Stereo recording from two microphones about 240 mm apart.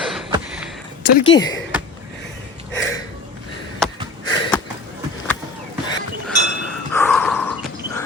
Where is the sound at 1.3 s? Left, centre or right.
Centre.